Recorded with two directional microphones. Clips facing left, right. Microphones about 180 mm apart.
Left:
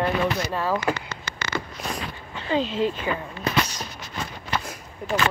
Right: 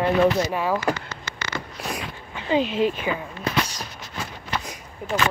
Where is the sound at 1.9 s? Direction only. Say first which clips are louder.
Even; 15° right (ahead or behind).